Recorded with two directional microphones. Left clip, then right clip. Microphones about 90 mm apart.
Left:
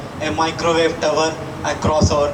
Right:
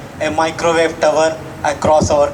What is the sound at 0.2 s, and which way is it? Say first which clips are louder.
Speech: right 4 dB; 35° right (ahead or behind).